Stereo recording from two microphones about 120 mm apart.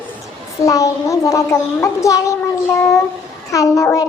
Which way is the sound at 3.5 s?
25° left (ahead or behind).